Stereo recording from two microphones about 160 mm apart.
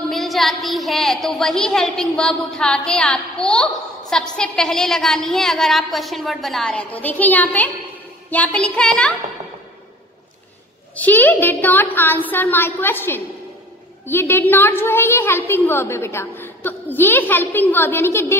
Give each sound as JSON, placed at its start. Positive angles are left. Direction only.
{"t": 0.1, "sound": "a woman's voice", "side_deg": 0}
{"t": 11.0, "sound": "a woman's voice", "side_deg": 10}